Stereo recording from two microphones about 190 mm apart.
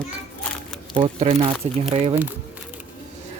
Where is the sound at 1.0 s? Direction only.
30° right (ahead or behind).